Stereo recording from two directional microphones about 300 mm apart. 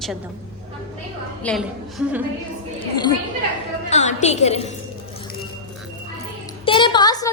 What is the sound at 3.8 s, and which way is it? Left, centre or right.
Speech, left.